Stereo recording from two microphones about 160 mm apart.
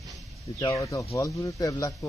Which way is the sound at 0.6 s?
20° left (ahead or behind).